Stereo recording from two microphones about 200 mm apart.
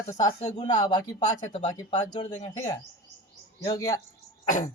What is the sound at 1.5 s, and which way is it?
Speech, 35° left (ahead or behind).